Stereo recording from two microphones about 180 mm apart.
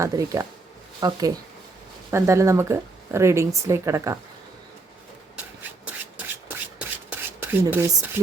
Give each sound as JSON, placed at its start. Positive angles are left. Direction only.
{"t": 0.0, "sound": "speech", "side_deg": -20}
{"t": 5.8, "sound": "rub", "side_deg": -10}